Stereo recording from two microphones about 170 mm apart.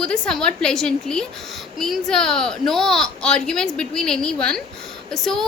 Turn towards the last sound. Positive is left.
turn(degrees=0)  # may be behind; listen again after turning